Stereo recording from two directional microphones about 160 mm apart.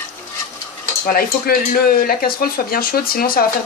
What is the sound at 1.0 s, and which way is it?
Speech, 65° left (ahead or behind).